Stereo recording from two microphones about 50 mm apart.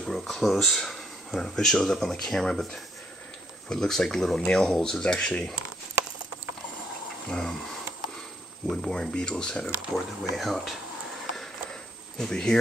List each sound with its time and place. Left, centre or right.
0.0 s speech: centre
5.0 s speech: centre
7.2 s speech: centre
8.6 s speech: centre
10.3 s speech: centre
11.3 s a sound: centre